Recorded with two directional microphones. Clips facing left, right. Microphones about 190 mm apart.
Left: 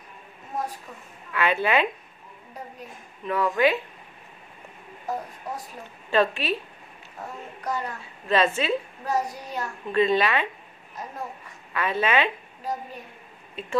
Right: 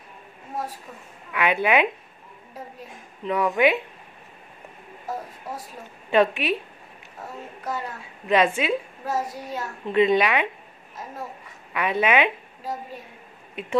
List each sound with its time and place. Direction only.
1.3 s a woman's voice: 15° right (ahead or behind)
3.3 s speech: 20° right (ahead or behind)
6.0 s a woman's voice: 15° right (ahead or behind)
7.6 s a woman's voice: 5° right (ahead or behind)
9.9 s a woman's voice: 20° right (ahead or behind)
11.7 s a woman's voice: 15° right (ahead or behind)